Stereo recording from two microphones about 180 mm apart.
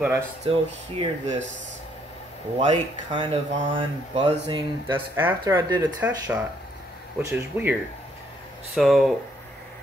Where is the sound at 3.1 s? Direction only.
30° right (ahead or behind).